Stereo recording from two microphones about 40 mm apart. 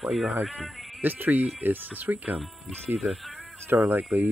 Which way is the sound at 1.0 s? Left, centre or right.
Right.